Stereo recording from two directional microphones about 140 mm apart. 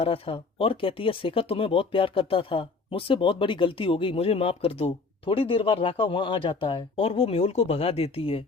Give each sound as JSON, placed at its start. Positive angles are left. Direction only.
{"t": 0.0, "sound": "speech", "side_deg": 40}